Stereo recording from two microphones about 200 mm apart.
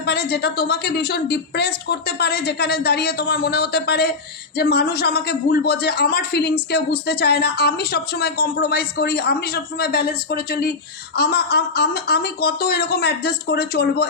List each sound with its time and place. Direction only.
0.0 s a woman's voice: 55° left (ahead or behind)